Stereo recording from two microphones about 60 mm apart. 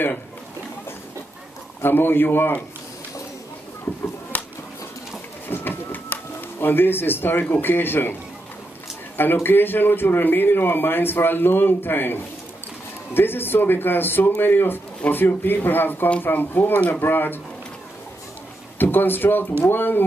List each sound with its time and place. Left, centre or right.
1.8 s speech: left
5.5 s a sound: left
6.6 s speech: left
18.8 s speech: left